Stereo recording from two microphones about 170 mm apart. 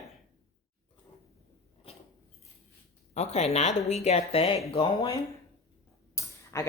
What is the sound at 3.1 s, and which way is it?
Speech, 40° left (ahead or behind).